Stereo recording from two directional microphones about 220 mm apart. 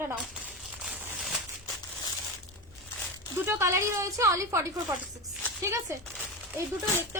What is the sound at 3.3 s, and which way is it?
A woman's voice, 10° right (ahead or behind).